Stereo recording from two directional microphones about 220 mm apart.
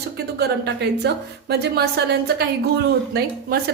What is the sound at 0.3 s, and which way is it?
A woman's voice, 50° right (ahead or behind).